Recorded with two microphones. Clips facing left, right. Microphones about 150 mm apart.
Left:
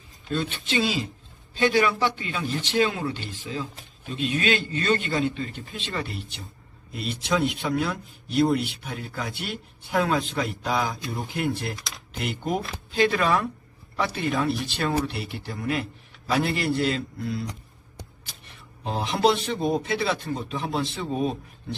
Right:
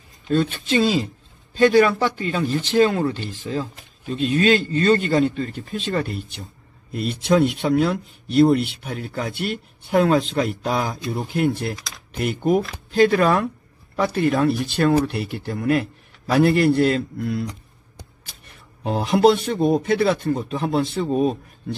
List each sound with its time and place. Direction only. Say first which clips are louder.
0.3 s speech: right 8 dB; 45° right (ahead or behind)
18.9 s speech: right 6 dB; 50° right (ahead or behind)